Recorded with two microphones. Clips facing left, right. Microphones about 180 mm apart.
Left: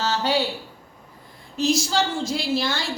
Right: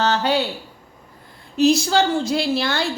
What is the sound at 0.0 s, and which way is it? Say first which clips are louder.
Speech: right 4 dB; 60° right (ahead or behind).